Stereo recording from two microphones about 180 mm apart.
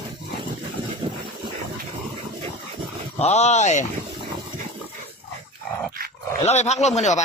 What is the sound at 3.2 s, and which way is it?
Speech, 40° left (ahead or behind).